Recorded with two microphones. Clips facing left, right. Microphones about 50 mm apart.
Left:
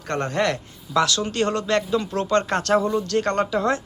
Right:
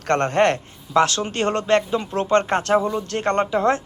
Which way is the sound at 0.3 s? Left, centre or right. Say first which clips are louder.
Right 5 dB; right.